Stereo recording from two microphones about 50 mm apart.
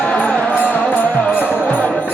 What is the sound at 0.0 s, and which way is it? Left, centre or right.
Music, left.